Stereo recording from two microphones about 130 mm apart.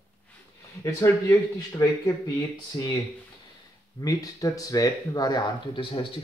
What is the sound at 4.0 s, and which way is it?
Speech, 25° left (ahead or behind).